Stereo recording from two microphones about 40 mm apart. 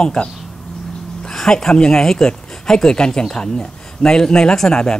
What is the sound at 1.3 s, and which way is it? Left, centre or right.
Speech, centre.